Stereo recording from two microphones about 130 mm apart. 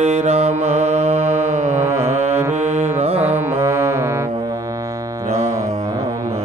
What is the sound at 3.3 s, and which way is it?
Music, 15° right (ahead or behind).